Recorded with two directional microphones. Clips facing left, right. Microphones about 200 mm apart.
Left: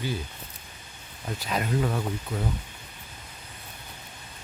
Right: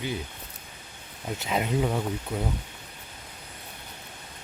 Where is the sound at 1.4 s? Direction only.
20° right (ahead or behind).